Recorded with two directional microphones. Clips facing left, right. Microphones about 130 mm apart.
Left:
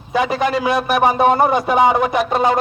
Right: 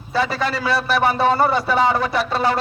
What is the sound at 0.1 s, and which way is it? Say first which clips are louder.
A man's voice: left 4 dB; 15° left (ahead or behind).